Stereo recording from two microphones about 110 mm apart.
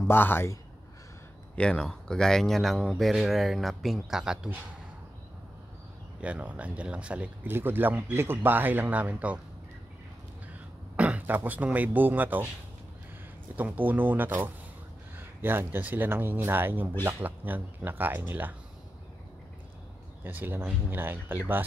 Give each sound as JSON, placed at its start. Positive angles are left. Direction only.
{"t": 0.1, "sound": "a man's voice", "side_deg": 20}
{"t": 1.5, "sound": "speech", "side_deg": 10}
{"t": 6.2, "sound": "speech", "side_deg": -10}
{"t": 11.0, "sound": "speech", "side_deg": -15}
{"t": 13.6, "sound": "speech", "side_deg": -15}
{"t": 20.2, "sound": "speech", "side_deg": -20}